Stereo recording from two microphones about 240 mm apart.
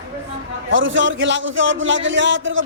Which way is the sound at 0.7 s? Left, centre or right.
Right.